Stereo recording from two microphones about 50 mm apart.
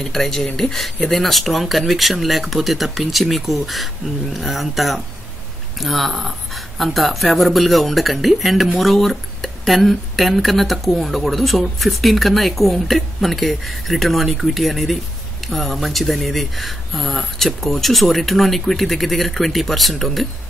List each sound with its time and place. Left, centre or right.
0.0 s speech: centre